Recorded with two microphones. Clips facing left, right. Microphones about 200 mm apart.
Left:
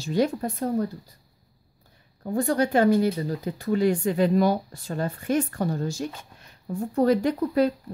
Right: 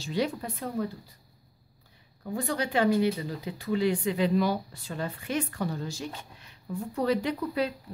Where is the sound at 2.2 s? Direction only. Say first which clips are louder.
Left 7 dB; 45° left (ahead or behind).